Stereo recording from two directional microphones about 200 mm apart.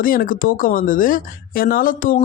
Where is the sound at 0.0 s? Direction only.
45° left (ahead or behind).